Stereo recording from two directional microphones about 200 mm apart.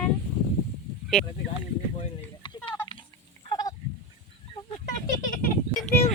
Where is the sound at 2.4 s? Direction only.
25° left (ahead or behind).